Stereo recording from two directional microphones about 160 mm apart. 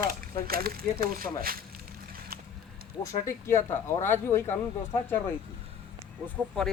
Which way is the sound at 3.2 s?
15° left (ahead or behind).